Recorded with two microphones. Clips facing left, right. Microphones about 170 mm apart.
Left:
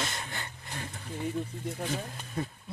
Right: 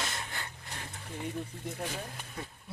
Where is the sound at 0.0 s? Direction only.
Centre (ahead or behind).